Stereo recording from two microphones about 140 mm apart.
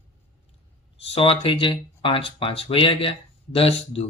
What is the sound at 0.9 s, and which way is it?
Speech, 45° left (ahead or behind).